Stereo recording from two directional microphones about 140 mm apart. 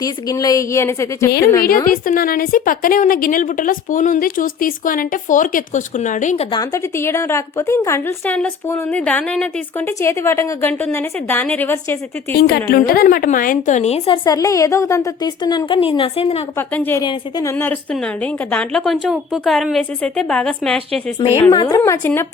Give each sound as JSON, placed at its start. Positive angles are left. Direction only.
{"t": 0.0, "sound": "a woman's voice", "side_deg": 25}
{"t": 1.6, "sound": "a woman's voice", "side_deg": 90}
{"t": 6.5, "sound": "a woman's voice", "side_deg": 25}
{"t": 12.3, "sound": "a woman's voice", "side_deg": 90}
{"t": 14.3, "sound": "a woman's voice", "side_deg": 25}
{"t": 16.6, "sound": "a woman's voice", "side_deg": 15}
{"t": 17.0, "sound": "a woman's voice", "side_deg": 30}
{"t": 22.0, "sound": "a woman's voice", "side_deg": 15}